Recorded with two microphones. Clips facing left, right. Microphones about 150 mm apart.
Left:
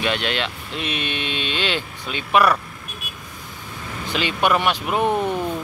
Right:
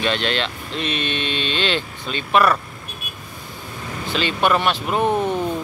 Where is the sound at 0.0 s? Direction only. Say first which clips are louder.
Right 1 dB; 10° left (ahead or behind).